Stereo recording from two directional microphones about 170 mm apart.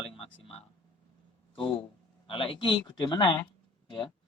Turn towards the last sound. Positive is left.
turn(degrees=30)  # may be behind; listen again after turning